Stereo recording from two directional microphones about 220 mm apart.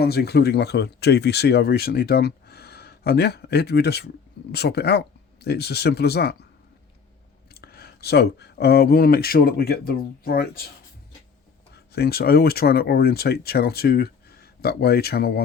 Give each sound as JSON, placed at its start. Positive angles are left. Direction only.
{"t": 0.0, "sound": "speech", "side_deg": 45}
{"t": 7.5, "sound": "speech", "side_deg": 45}
{"t": 11.7, "sound": "speech", "side_deg": 45}